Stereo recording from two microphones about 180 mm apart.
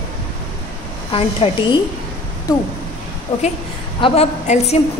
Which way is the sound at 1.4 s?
30° left (ahead or behind).